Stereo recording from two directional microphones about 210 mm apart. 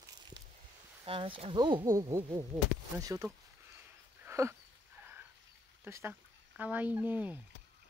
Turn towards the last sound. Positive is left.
turn(degrees=-10)  # may be behind; listen again after turning